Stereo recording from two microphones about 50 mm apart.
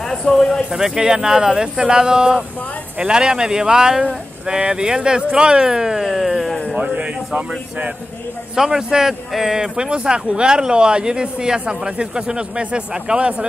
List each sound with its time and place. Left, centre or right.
0.0 s speech: centre
0.7 s speech: centre
7.3 s speech: right
8.5 s speech: centre